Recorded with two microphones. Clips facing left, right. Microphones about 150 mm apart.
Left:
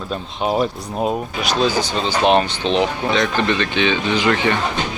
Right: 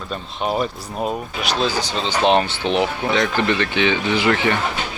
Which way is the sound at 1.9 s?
10° left (ahead or behind).